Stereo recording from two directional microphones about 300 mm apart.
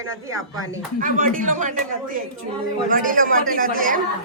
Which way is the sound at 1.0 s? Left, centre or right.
Right.